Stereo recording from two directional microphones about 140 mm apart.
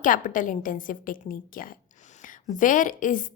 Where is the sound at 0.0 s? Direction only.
70° left (ahead or behind).